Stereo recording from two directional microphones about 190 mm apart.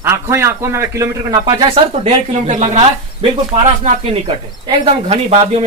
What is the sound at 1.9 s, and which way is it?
Speech, 35° right (ahead or behind).